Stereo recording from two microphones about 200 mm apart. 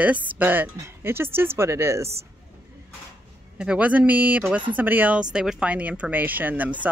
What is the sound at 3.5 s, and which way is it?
Speech, 5° right (ahead or behind).